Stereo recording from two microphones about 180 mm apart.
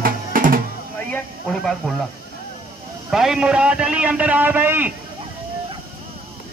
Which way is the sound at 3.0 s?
5° right (ahead or behind).